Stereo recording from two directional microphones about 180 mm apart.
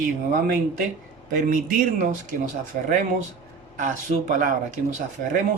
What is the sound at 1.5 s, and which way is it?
Speech, 50° right (ahead or behind).